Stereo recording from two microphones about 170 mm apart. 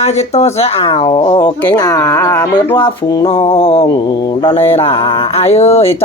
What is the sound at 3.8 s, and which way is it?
Mantra, 20° left (ahead or behind).